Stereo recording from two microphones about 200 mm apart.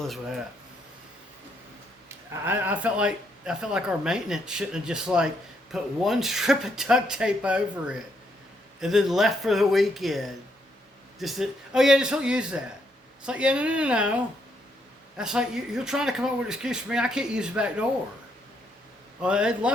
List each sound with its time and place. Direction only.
0.0 s speech: centre (ahead or behind)
2.0 s a man's voice: 10° right (ahead or behind)
15.2 s a man's voice: 5° right (ahead or behind)
19.2 s a man's voice: 5° right (ahead or behind)